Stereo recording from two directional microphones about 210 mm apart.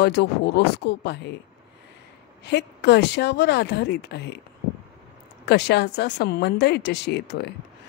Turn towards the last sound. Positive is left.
turn(degrees=55)  # may be behind; listen again after turning